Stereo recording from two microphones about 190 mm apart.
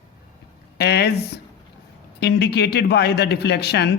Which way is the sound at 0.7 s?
60° left (ahead or behind).